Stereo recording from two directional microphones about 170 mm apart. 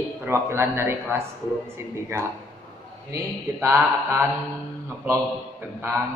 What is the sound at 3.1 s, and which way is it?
A man's voice, 15° right (ahead or behind).